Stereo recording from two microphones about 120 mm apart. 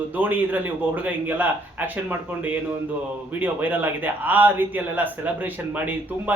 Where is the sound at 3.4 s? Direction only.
15° right (ahead or behind).